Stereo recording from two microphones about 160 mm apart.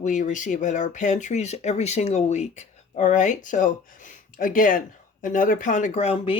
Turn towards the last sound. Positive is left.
turn(degrees=40)  # may be behind; listen again after turning